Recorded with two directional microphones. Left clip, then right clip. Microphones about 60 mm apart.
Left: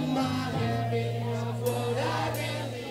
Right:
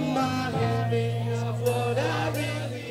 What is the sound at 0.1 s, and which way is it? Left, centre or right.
Music, right.